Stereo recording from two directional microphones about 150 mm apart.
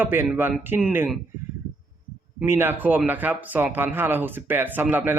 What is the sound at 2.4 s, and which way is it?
Speech, 15° right (ahead or behind).